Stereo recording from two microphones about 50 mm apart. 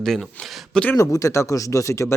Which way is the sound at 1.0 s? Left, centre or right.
Left.